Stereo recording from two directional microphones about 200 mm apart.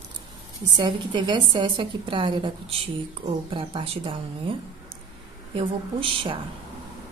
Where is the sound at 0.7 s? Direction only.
25° right (ahead or behind).